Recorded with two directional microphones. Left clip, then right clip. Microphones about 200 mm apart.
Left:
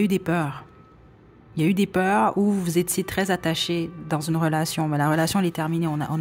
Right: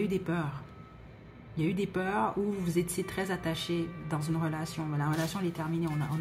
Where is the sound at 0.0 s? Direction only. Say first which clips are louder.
Left 9 dB; 50° left (ahead or behind).